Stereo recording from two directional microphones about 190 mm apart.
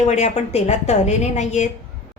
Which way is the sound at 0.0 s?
35° left (ahead or behind).